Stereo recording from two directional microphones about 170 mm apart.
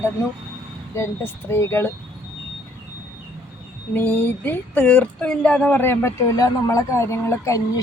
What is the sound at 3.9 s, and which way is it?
Speech, 10° left (ahead or behind).